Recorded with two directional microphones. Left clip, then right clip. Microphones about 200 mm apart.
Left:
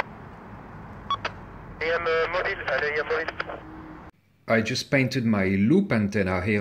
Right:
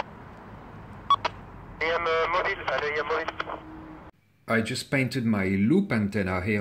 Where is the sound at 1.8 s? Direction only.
40° right (ahead or behind).